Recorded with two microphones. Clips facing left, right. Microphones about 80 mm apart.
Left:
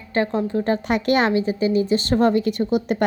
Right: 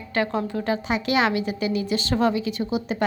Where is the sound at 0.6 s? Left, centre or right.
Left.